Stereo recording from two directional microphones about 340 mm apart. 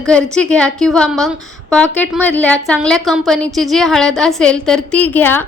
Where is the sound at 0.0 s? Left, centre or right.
Centre.